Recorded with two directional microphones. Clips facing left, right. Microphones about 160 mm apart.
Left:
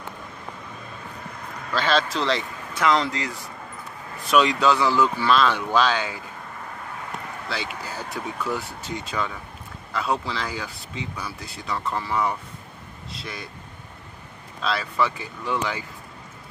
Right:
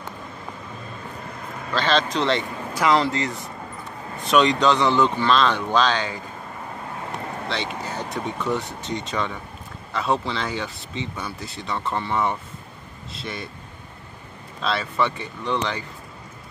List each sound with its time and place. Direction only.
1.8 s speech: 10° left (ahead or behind)
7.4 s speech: 5° left (ahead or behind)
14.6 s speech: centre (ahead or behind)